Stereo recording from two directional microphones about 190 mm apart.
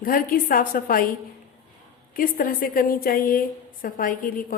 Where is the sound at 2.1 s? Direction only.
45° left (ahead or behind).